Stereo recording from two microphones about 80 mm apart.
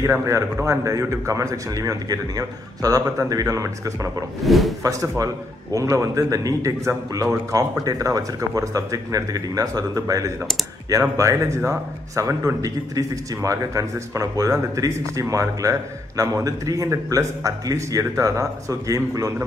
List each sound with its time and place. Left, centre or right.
0.0 s a man's voice: right
4.4 s speech: centre
5.1 s a man's voice: right